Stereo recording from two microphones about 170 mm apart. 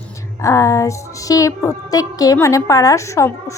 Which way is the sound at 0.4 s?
20° left (ahead or behind).